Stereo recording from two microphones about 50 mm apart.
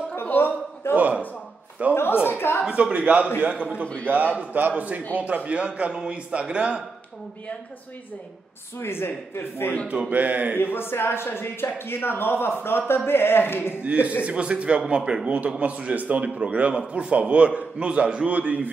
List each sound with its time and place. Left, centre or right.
0.2 s a sound: left
0.9 s a sound: right
2.2 s chuckle: left
2.7 s a man's voice: right
3.8 s a man's voice: left
4.1 s a man's voice: right
8.7 s speech: left
10.0 s a man's voice: right
10.6 s speech: left
13.8 s a man's voice: right